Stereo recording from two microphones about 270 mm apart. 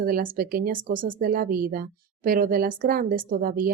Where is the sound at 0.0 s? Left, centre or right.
Right.